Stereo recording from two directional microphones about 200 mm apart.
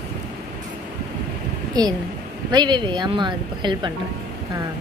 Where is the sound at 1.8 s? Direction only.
20° right (ahead or behind).